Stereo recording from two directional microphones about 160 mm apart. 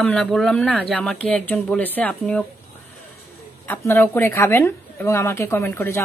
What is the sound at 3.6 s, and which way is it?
A woman's voice, 15° left (ahead or behind).